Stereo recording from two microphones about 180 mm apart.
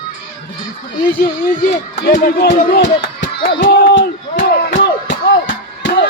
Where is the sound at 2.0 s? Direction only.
70° left (ahead or behind).